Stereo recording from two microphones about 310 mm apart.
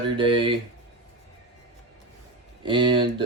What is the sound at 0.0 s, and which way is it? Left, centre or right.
Speech, centre.